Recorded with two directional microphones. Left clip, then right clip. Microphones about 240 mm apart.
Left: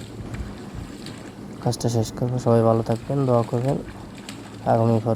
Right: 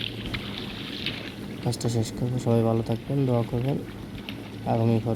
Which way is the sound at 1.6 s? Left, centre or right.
Centre.